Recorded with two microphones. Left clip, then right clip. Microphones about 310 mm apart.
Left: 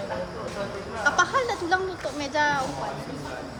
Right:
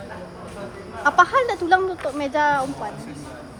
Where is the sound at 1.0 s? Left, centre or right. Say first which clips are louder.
Right 6 dB; right.